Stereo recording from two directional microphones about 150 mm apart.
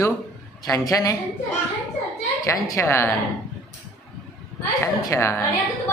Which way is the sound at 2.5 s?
20° left (ahead or behind).